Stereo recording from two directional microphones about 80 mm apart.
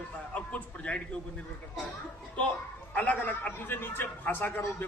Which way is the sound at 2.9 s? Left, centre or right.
Centre.